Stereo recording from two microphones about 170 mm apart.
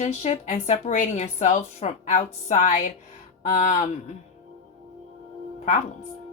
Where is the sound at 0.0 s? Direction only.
40° left (ahead or behind).